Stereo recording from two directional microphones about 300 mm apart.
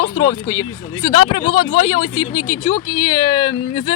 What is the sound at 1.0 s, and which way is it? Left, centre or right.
Speech, centre.